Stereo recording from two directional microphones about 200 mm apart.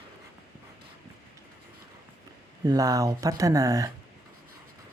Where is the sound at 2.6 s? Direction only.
15° right (ahead or behind).